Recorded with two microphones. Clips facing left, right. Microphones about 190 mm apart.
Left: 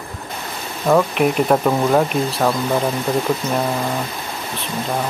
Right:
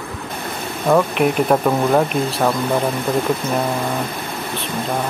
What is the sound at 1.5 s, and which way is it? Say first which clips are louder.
Speech: even; centre (ahead or behind).